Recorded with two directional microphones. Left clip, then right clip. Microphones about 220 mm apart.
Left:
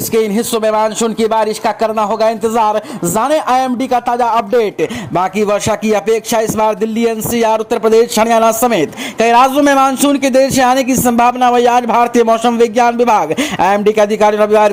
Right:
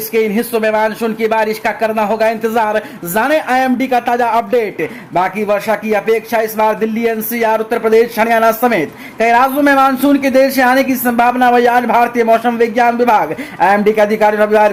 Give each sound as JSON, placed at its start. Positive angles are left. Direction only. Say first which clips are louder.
{"t": 0.1, "sound": "speech", "louder": "even", "side_deg": 30}